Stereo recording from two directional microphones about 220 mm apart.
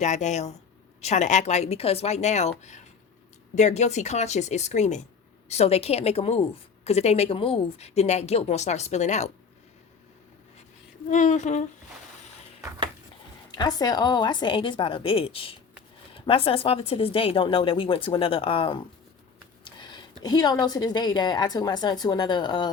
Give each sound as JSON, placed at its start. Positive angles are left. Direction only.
{"t": 0.0, "sound": "a woman's voice", "side_deg": 30}
{"t": 11.1, "sound": "a woman's voice", "side_deg": 35}
{"t": 13.6, "sound": "a woman's voice", "side_deg": 15}
{"t": 19.6, "sound": "a sound", "side_deg": 20}
{"t": 20.2, "sound": "a woman's voice", "side_deg": 15}